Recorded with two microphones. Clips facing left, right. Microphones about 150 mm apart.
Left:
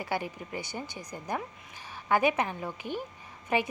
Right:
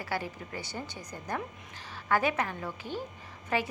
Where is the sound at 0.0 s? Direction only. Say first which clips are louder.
Left 2 dB; 20° left (ahead or behind).